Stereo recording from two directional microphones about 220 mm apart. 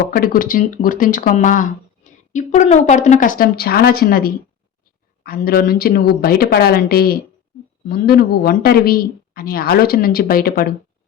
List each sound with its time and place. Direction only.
0.1 s speech: 40° left (ahead or behind)